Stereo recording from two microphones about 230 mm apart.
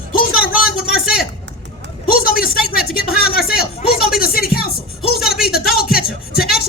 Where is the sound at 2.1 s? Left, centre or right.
Left.